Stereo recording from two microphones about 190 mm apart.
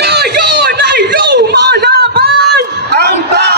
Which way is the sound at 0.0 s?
60° right (ahead or behind).